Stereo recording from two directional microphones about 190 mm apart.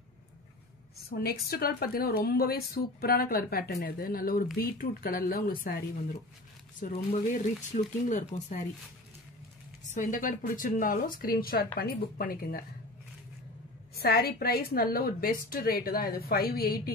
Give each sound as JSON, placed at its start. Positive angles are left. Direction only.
{"t": 1.1, "sound": "a woman's voice", "side_deg": 55}
{"t": 6.8, "sound": "speech", "side_deg": 40}
{"t": 9.8, "sound": "a woman's voice", "side_deg": 45}
{"t": 13.9, "sound": "a woman's voice", "side_deg": 55}